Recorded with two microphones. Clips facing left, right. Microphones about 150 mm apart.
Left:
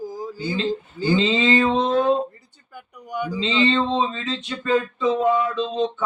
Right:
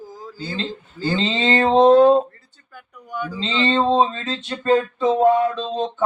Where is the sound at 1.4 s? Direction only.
50° right (ahead or behind).